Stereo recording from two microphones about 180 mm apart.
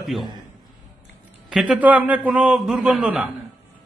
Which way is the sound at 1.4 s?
5° right (ahead or behind).